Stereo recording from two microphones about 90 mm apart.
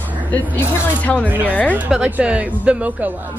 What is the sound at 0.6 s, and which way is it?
Speech, 15° left (ahead or behind).